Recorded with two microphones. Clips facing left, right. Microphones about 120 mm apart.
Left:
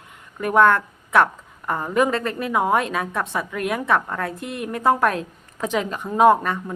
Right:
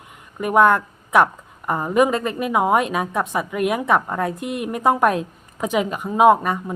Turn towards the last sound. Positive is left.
turn(degrees=-15)  # may be behind; listen again after turning